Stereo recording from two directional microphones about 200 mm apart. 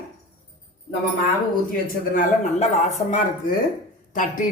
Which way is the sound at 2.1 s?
35° left (ahead or behind).